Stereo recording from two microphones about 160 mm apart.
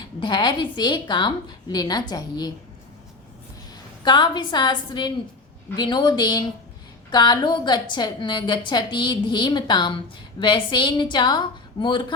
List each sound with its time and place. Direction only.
0.0 s a woman's voice: 25° left (ahead or behind)
4.0 s a woman's voice: 30° left (ahead or behind)